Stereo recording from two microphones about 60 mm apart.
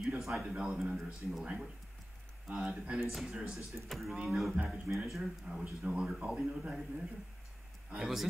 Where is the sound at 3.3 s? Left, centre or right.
Centre.